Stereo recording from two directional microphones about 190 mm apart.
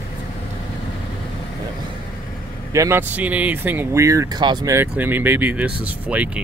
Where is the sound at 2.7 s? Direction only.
15° right (ahead or behind).